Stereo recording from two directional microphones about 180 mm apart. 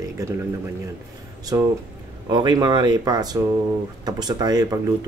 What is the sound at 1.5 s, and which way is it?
Speech, 15° right (ahead or behind).